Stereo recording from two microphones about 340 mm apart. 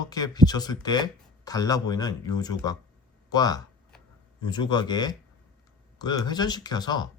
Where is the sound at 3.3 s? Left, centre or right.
Centre.